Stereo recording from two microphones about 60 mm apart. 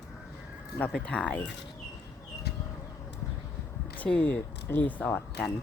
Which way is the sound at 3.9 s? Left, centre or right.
Left.